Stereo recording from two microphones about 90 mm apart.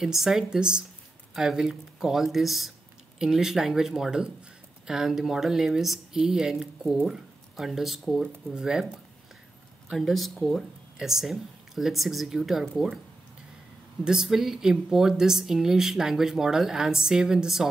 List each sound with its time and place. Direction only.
0.0 s speech: 5° right (ahead or behind)
14.0 s speech: 5° right (ahead or behind)